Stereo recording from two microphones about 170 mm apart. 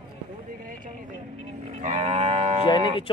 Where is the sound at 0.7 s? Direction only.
50° right (ahead or behind).